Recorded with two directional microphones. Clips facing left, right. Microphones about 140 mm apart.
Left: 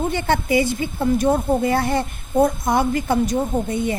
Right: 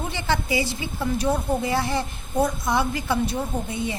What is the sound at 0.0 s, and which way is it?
A woman's voice, 50° left (ahead or behind).